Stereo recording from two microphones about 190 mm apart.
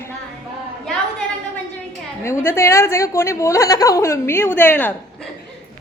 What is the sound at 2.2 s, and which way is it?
A woman's voice, 15° left (ahead or behind).